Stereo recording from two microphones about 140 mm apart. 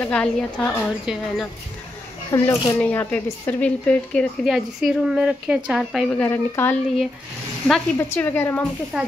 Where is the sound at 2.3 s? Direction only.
25° left (ahead or behind).